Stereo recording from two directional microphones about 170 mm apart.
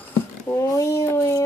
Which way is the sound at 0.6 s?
20° left (ahead or behind).